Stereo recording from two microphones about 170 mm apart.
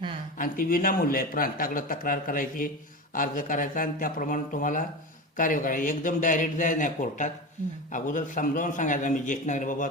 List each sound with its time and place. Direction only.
0.3 s a man's voice: 55° left (ahead or behind)